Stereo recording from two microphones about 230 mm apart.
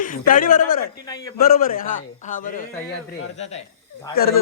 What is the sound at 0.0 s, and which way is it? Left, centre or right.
Speech, left.